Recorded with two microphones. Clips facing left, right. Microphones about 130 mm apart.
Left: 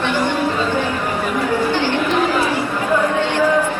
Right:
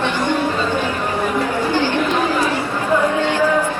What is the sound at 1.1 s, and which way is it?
Chatter, 15° right (ahead or behind).